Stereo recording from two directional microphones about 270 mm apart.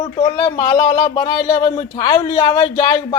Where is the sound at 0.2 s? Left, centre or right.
Centre.